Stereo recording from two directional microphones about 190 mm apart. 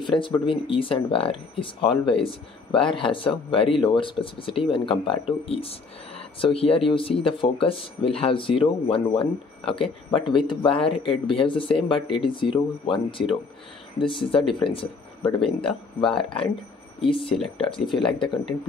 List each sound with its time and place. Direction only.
0.0 s speech: 25° left (ahead or behind)